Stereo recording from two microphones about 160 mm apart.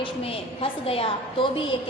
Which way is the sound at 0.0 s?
35° left (ahead or behind).